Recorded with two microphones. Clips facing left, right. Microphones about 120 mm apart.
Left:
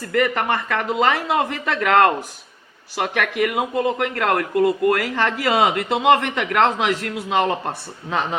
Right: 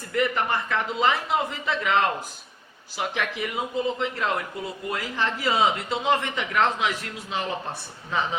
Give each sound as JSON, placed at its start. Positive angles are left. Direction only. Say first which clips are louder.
{"t": 0.0, "sound": "speech", "louder": "left 5 dB", "side_deg": 90}